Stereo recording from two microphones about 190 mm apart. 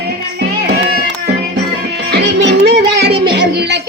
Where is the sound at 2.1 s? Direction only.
65° right (ahead or behind).